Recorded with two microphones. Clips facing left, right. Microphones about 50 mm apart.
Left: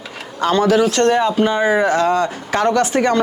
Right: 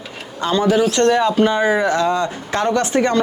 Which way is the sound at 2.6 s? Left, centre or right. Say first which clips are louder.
Left 2 dB; left.